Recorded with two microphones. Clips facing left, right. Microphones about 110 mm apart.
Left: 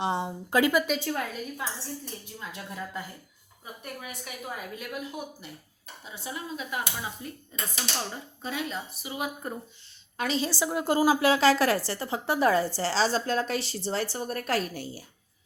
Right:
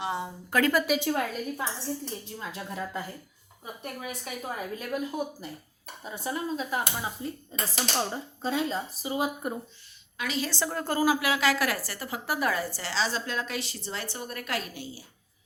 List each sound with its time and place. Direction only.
0.0 s speech: 25° left (ahead or behind)
0.7 s a woman's voice: centre (ahead or behind)
0.9 s a woman's voice: 20° right (ahead or behind)
2.5 s speech: 30° right (ahead or behind)
4.4 s speech: 35° right (ahead or behind)
10.2 s a woman's voice: 30° left (ahead or behind)
10.4 s a woman's voice: 10° left (ahead or behind); by 15.0 s 45° left (ahead or behind)